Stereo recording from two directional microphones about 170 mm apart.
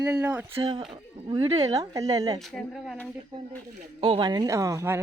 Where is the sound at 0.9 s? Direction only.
25° right (ahead or behind).